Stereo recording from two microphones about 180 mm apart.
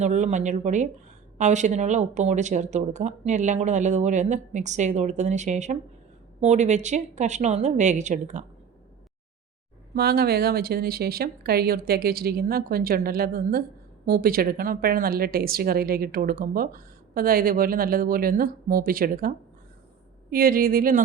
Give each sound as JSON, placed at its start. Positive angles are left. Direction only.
{"t": 0.0, "sound": "speech", "side_deg": -40}
{"t": 9.9, "sound": "speech", "side_deg": -60}
{"t": 20.3, "sound": "speech", "side_deg": -55}